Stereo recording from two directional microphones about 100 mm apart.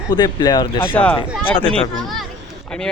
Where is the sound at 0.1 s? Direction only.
40° left (ahead or behind).